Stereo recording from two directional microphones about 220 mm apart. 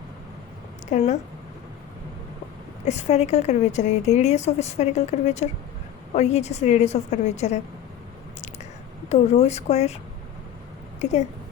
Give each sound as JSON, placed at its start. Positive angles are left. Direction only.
{"t": 0.9, "sound": "a woman's voice", "side_deg": 30}
{"t": 2.8, "sound": "a woman's voice", "side_deg": 30}
{"t": 9.0, "sound": "speech", "side_deg": 30}
{"t": 11.0, "sound": "a woman's voice", "side_deg": 30}